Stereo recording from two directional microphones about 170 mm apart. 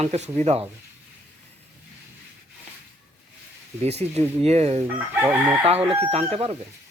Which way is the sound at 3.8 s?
40° right (ahead or behind).